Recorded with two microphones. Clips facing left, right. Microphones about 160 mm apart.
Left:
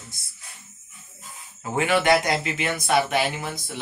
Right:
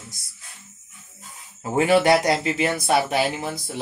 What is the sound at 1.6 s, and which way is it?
Speech, 35° right (ahead or behind).